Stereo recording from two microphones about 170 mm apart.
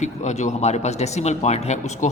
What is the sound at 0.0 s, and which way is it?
Speech, 45° left (ahead or behind).